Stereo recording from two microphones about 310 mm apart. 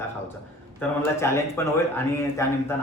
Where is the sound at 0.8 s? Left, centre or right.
Centre.